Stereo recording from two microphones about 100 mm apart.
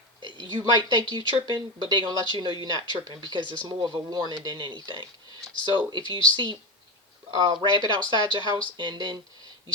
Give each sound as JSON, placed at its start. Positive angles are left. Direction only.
{"t": 0.2, "sound": "speech", "side_deg": -50}